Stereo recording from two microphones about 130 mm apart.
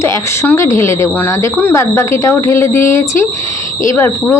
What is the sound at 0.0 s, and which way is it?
A woman's voice, 20° left (ahead or behind).